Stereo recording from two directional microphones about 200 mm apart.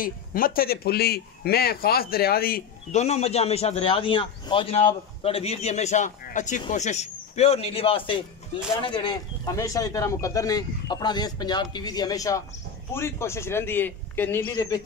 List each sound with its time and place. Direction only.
0.0 s speech: 45° left (ahead or behind)
2.9 s a man's voice: 35° left (ahead or behind)